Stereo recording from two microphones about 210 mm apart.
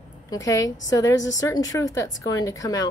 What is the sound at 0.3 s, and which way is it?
A woman's voice, 15° left (ahead or behind).